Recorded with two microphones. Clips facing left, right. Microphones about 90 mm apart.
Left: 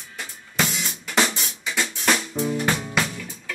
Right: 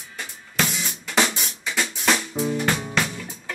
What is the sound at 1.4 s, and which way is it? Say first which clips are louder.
Music: even; centre (ahead or behind).